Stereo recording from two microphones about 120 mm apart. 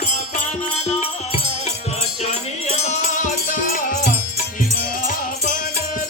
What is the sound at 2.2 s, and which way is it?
Music, 65° left (ahead or behind).